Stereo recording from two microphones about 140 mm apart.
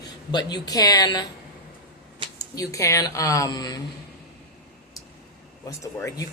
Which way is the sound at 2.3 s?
25° left (ahead or behind).